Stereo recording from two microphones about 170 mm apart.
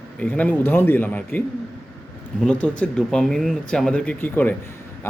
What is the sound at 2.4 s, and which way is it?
Speech, 5° left (ahead or behind).